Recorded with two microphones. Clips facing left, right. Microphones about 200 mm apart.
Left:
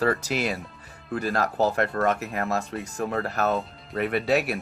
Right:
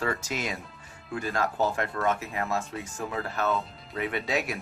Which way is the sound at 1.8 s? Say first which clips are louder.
Left 4 dB; 70° left (ahead or behind).